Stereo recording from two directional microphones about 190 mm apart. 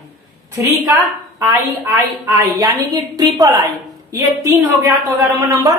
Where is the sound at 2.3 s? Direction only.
20° right (ahead or behind).